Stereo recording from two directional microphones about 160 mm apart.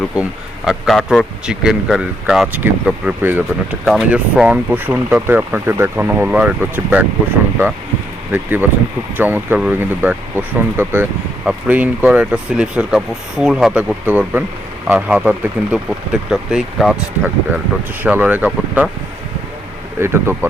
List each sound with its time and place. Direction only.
0.2 s a man's voice: 5° right (ahead or behind)
8.3 s a man's voice: 10° right (ahead or behind)
20.0 s a man's voice: 15° right (ahead or behind)